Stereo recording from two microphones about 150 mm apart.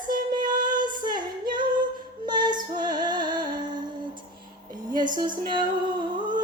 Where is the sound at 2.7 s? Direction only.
30° right (ahead or behind).